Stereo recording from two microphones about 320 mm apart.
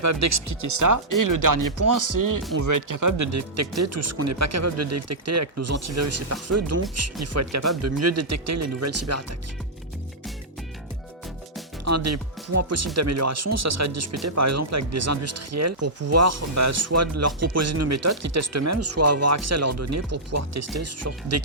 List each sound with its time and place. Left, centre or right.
0.0 s speech: right
11.9 s speech: right